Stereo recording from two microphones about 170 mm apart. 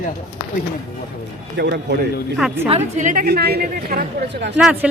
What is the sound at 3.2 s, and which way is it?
A man's voice, 70° right (ahead or behind).